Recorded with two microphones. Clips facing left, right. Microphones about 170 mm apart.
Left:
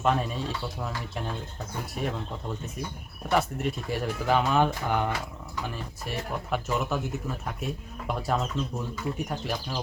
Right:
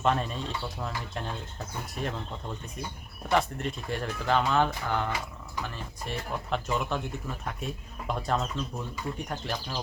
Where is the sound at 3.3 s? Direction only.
5° left (ahead or behind).